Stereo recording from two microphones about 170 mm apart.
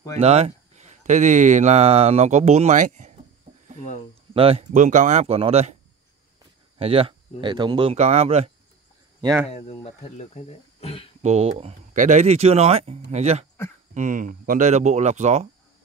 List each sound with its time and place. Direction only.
0.2 s speech: 40° right (ahead or behind)
4.3 s speech: 35° right (ahead or behind)
6.8 s speech: 35° right (ahead or behind)
7.9 s speech: 40° right (ahead or behind)
9.2 s speech: 15° right (ahead or behind)
9.5 s speech: 40° left (ahead or behind)
11.2 s speech: 40° right (ahead or behind)